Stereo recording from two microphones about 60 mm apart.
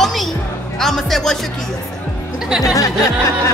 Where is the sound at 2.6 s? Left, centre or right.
Left.